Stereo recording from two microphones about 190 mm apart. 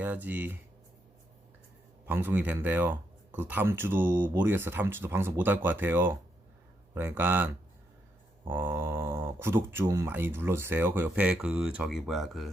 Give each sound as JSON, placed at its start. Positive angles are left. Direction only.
{"t": 0.0, "sound": "speech", "side_deg": -10}
{"t": 2.0, "sound": "speech", "side_deg": -10}